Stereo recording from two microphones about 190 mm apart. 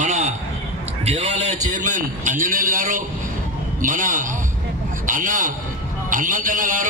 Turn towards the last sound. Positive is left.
turn(degrees=-45)  # may be behind; listen again after turning